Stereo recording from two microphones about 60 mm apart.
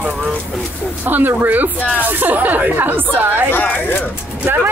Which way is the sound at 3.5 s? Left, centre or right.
Left.